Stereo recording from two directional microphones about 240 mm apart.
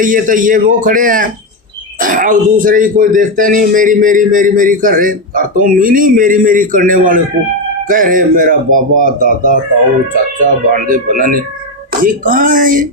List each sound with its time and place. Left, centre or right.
0.0 s speech: right